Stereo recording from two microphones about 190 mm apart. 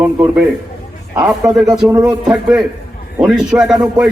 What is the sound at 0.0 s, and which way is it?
A man's voice, 5° right (ahead or behind).